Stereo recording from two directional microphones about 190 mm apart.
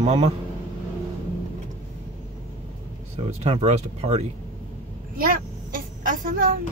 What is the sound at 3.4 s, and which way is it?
Speech, 35° right (ahead or behind).